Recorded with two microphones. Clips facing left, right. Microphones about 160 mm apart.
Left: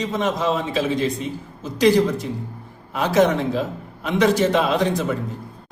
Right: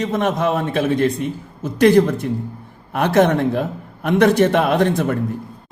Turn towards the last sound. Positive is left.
turn(degrees=-55)  # may be behind; listen again after turning